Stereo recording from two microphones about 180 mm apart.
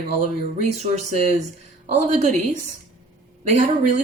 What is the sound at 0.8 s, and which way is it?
A woman's voice, 40° right (ahead or behind).